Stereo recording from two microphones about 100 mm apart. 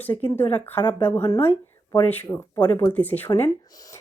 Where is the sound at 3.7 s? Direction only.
35° left (ahead or behind).